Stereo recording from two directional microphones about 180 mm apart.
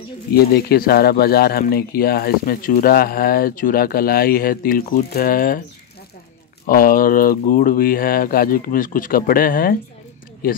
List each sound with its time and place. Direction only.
0.6 s speech: 60° left (ahead or behind)
6.6 s speech: 50° left (ahead or behind)